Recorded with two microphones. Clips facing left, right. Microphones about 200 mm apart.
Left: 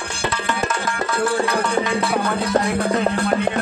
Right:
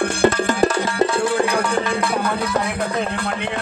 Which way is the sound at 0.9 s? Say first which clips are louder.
Right 3 dB; 20° right (ahead or behind).